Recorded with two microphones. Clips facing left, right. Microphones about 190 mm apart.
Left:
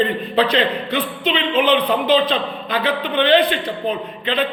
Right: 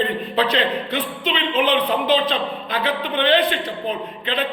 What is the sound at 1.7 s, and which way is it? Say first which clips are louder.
A woman's voice: left 3 dB; centre (ahead or behind).